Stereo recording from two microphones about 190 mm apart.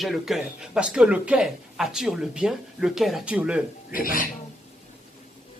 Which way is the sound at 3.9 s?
50° left (ahead or behind).